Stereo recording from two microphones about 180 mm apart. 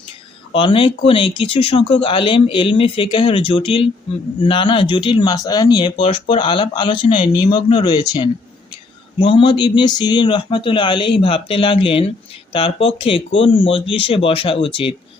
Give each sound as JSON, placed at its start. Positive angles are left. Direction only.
{"t": 0.5, "sound": "speech", "side_deg": 30}